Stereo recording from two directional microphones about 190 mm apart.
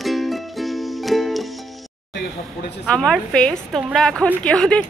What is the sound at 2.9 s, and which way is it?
A woman's voice, 5° left (ahead or behind).